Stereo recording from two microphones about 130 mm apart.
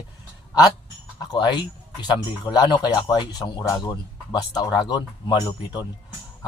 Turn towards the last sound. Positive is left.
turn(degrees=30)  # may be behind; listen again after turning